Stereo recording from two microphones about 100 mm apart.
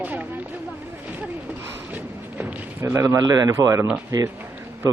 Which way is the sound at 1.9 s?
15° right (ahead or behind).